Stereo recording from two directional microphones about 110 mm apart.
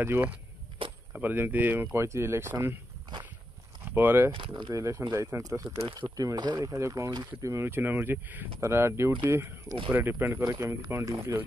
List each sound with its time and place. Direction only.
0.0 s speech: 15° right (ahead or behind)
3.8 s speech: 20° right (ahead or behind)
4.3 s speech: 50° right (ahead or behind)
4.7 s speech: 25° right (ahead or behind)
7.5 s speech: 20° right (ahead or behind)
10.4 s speech: 30° right (ahead or behind)